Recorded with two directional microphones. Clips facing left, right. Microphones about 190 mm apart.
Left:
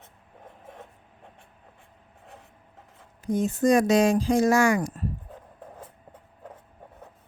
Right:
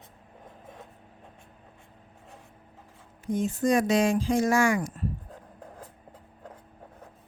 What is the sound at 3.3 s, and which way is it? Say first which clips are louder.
Speech: left 3 dB; 40° left (ahead or behind).